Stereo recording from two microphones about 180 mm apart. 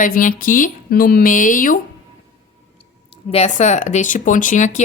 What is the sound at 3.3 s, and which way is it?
Speech, 40° left (ahead or behind).